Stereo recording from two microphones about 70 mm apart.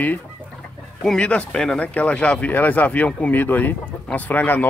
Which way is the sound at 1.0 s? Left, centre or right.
Centre.